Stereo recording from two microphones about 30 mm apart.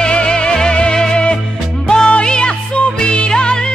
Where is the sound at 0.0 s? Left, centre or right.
Left.